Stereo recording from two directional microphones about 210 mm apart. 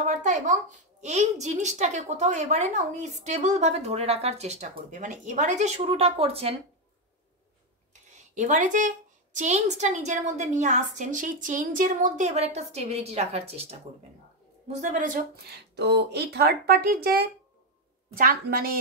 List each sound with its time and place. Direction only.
0.0 s a sound: 35° right (ahead or behind)
1.0 s a woman's voice: 35° right (ahead or behind)
8.4 s a woman's voice: 35° right (ahead or behind)
14.8 s speech: 35° right (ahead or behind)